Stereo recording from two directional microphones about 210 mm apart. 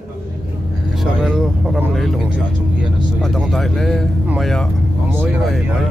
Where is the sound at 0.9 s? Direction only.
Centre (ahead or behind).